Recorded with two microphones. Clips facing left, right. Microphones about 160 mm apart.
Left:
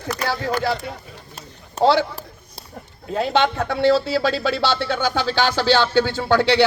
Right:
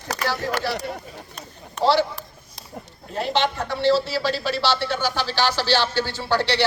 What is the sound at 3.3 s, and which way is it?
A man's voice, 55° left (ahead or behind).